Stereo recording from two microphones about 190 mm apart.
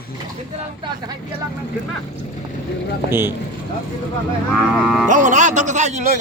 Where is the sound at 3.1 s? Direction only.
10° right (ahead or behind).